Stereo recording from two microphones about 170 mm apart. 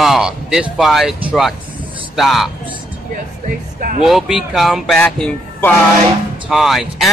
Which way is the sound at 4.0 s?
Centre (ahead or behind).